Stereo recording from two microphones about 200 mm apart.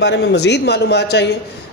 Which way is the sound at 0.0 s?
55° left (ahead or behind).